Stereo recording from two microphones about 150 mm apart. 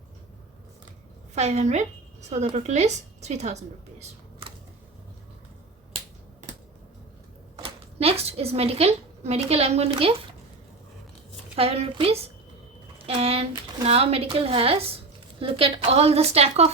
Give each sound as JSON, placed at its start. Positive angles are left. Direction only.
{"t": 1.4, "sound": "a woman's voice", "side_deg": -50}
{"t": 7.6, "sound": "a woman's voice", "side_deg": -40}
{"t": 11.5, "sound": "a woman's voice", "side_deg": -40}